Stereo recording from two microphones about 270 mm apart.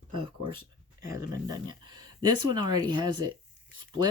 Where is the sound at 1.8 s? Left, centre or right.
Centre.